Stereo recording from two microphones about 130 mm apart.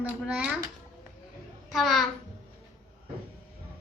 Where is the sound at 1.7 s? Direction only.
Centre (ahead or behind).